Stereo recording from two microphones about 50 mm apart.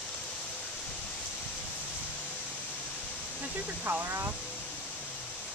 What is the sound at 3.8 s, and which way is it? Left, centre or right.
Speech, right.